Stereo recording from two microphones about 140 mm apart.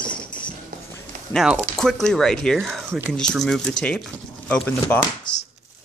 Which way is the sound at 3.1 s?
5° left (ahead or behind).